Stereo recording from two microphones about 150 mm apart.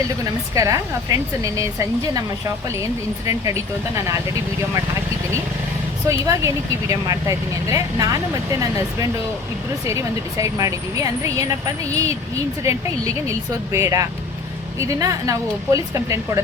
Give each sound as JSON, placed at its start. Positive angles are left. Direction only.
{"t": 0.5, "sound": "speech", "side_deg": -20}
{"t": 6.1, "sound": "speech", "side_deg": -20}
{"t": 9.8, "sound": "speech", "side_deg": -20}